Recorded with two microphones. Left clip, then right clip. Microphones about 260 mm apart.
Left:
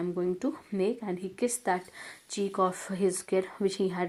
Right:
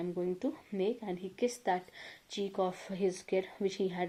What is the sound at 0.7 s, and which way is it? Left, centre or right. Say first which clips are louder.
Speech: left 4 dB; left.